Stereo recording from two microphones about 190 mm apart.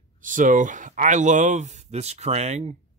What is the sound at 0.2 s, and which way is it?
Speech, 45° right (ahead or behind).